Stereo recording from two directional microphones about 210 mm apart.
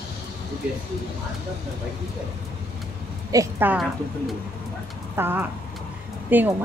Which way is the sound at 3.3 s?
15° right (ahead or behind).